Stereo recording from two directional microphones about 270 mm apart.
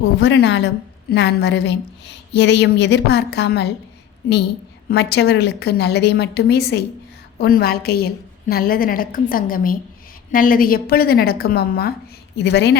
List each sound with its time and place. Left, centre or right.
0.2 s speech: left
4.9 s speech: left